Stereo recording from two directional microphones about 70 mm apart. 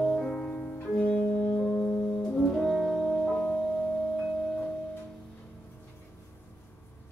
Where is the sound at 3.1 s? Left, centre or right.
Centre.